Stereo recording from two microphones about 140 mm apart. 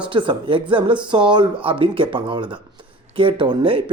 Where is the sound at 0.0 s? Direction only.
35° right (ahead or behind).